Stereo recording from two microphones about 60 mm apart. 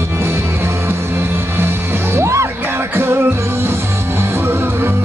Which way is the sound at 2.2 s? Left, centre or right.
Right.